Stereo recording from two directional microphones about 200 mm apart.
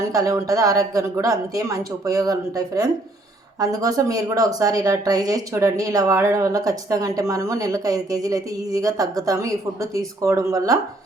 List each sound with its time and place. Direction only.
0.0 s a woman's voice: 15° right (ahead or behind)